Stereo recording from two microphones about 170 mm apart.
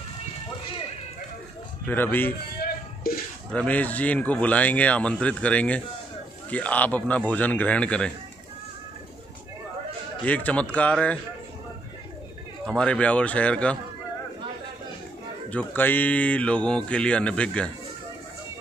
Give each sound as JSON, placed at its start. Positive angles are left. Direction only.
{"t": 1.9, "sound": "speech", "side_deg": 10}
{"t": 3.1, "sound": "a sound", "side_deg": 60}
{"t": 3.5, "sound": "speech", "side_deg": 10}
{"t": 10.2, "sound": "speech", "side_deg": 10}
{"t": 12.6, "sound": "speech", "side_deg": 5}
{"t": 15.5, "sound": "speech", "side_deg": 10}